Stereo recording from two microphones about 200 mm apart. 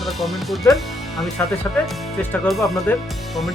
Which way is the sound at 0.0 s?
Centre (ahead or behind).